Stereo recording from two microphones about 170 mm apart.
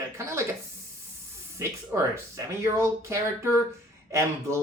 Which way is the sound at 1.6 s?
15° right (ahead or behind).